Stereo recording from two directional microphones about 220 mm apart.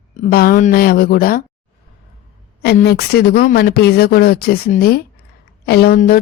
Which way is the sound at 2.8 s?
45° left (ahead or behind).